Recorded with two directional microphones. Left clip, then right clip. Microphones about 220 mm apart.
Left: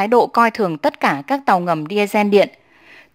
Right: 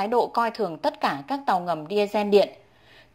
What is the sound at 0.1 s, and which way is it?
Speech, 35° left (ahead or behind).